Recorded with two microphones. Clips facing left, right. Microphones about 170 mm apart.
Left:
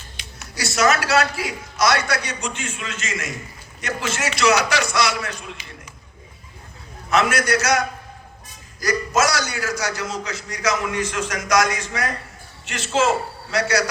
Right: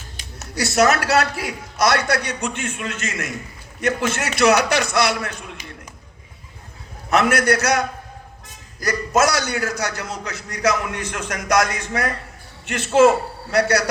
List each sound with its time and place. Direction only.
0.2 s a sound: 45° right (ahead or behind)
0.6 s a man's voice: 60° right (ahead or behind)
7.1 s a man's voice: 60° right (ahead or behind)
8.8 s a man's voice: 60° right (ahead or behind)